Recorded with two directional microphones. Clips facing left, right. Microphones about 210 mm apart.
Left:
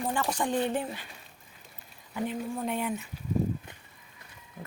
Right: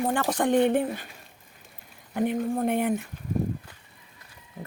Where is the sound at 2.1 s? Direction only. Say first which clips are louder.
Right 7 dB; 55° right (ahead or behind).